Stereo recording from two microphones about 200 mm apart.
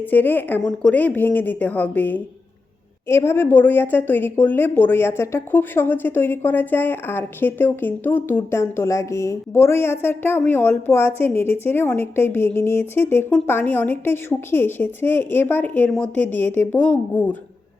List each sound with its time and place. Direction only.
0.1 s a woman's voice: 10° left (ahead or behind)